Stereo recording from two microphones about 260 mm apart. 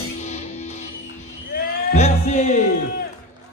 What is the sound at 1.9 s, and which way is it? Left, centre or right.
Music, left.